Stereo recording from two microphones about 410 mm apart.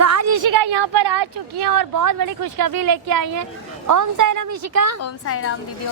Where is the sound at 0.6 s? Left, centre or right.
Right.